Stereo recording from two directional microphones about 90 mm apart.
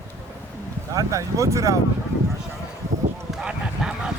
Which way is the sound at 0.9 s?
40° right (ahead or behind).